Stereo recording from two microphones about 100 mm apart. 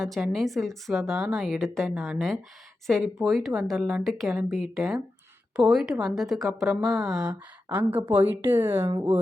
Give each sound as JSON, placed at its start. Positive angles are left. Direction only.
{"t": 0.0, "sound": "a woman's voice", "side_deg": 0}
{"t": 7.7, "sound": "speech", "side_deg": -15}